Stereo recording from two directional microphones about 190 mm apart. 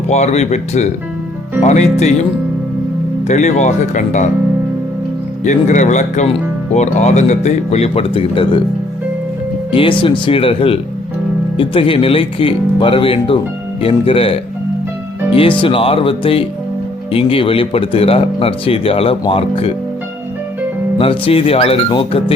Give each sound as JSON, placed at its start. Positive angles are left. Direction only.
{"t": 0.1, "sound": "speech", "side_deg": 35}
{"t": 3.2, "sound": "speech", "side_deg": 40}
{"t": 5.5, "sound": "speech", "side_deg": 40}
{"t": 9.7, "sound": "speech", "side_deg": 25}
{"t": 21.0, "sound": "speech", "side_deg": 30}